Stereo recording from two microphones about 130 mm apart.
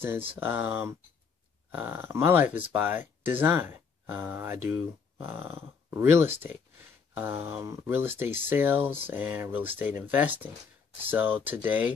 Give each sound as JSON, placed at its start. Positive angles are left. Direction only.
{"t": 0.4, "sound": "speech", "side_deg": -15}